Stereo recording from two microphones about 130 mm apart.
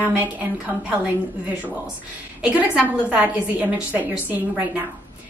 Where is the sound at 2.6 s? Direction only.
10° right (ahead or behind).